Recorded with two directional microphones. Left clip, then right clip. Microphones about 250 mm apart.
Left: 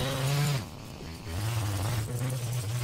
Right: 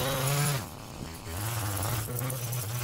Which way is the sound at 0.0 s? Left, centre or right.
Right.